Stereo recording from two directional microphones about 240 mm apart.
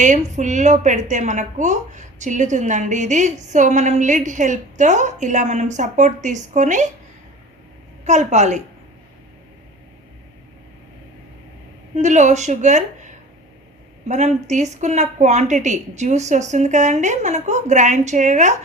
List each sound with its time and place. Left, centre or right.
0.0 s a woman's voice: right
8.0 s a woman's voice: right
11.9 s a woman's voice: right
14.1 s a woman's voice: right